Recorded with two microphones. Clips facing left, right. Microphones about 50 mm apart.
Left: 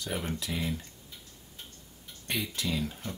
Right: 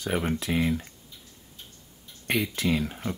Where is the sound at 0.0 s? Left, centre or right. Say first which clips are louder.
Right 7 dB; right.